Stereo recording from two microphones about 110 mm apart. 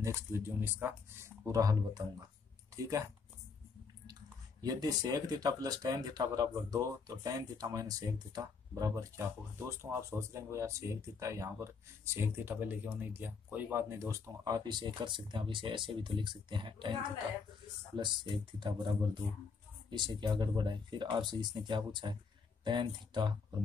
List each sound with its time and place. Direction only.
0.0 s speech: 25° right (ahead or behind)
1.4 s speech: 30° right (ahead or behind)
4.1 s speech: 35° right (ahead or behind)